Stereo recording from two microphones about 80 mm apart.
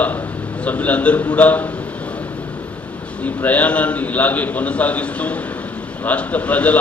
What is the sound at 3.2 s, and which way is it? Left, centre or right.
A man's voice, centre.